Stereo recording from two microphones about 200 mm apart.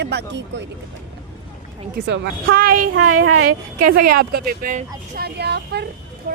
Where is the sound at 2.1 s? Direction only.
50° right (ahead or behind).